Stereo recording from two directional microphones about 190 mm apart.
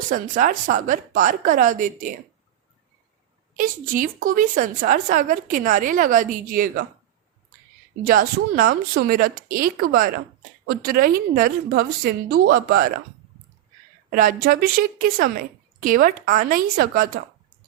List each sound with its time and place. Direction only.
0.1 s a woman's voice: 45° right (ahead or behind)
3.6 s a woman's voice: 45° right (ahead or behind)
8.0 s a woman's voice: 50° right (ahead or behind)
14.1 s a woman's voice: 45° right (ahead or behind)